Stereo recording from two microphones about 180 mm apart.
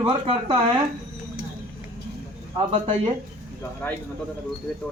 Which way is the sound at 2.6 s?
30° right (ahead or behind).